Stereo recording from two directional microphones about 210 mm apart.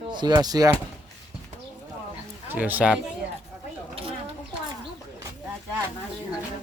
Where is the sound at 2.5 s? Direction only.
10° right (ahead or behind).